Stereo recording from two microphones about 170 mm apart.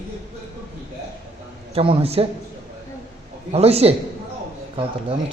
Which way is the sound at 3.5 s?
35° right (ahead or behind).